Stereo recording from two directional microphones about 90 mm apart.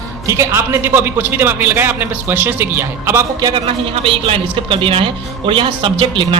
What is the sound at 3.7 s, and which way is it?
Speech, 80° right.